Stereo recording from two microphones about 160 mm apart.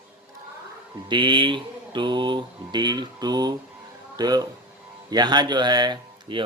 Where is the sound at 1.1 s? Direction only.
30° right (ahead or behind).